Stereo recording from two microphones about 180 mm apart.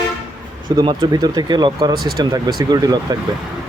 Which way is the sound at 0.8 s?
25° right (ahead or behind).